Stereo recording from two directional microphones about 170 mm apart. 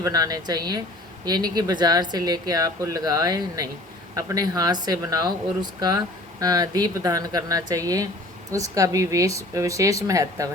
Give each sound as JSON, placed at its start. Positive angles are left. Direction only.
{"t": 0.0, "sound": "speech", "side_deg": -20}
{"t": 6.4, "sound": "speech", "side_deg": -20}